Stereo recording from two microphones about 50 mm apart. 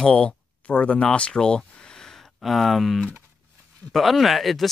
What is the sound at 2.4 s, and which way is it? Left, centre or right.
Speech, centre.